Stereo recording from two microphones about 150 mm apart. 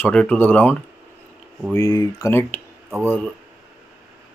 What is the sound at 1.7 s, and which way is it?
Speech, 25° left (ahead or behind).